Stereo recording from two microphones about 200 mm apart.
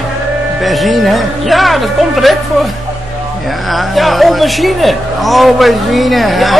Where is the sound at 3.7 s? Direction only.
Centre (ahead or behind).